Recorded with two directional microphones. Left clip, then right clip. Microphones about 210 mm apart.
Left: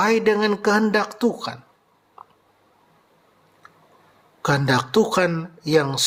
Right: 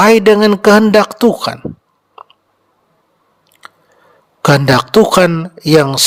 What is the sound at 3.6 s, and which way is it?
Biting, 40° right (ahead or behind).